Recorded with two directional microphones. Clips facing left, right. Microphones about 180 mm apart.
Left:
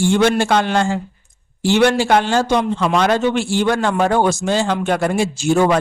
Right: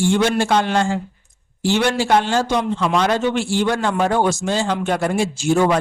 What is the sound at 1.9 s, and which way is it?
A man's voice, 60° left (ahead or behind).